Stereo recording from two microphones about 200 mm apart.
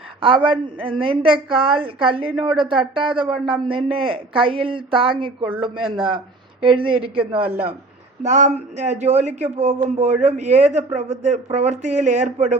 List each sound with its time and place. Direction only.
0.2 s speech: 25° right (ahead or behind)
8.2 s a man's voice: 35° right (ahead or behind)